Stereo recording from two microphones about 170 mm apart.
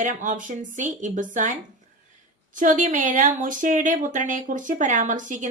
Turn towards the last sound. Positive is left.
turn(degrees=-45)  # may be behind; listen again after turning